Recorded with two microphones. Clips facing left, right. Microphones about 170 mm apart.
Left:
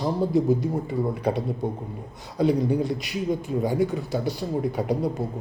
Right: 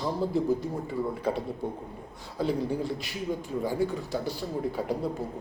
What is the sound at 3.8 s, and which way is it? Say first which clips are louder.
A man's voice: left 4 dB; 15° left (ahead or behind).